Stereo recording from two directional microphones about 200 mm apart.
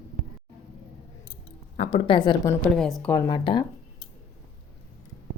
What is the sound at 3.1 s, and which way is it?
Speech, 20° left (ahead or behind).